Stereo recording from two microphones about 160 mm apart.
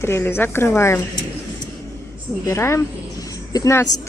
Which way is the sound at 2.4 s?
15° left (ahead or behind).